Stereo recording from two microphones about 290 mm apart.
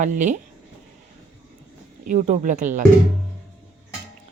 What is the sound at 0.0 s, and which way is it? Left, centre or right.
Speech, right.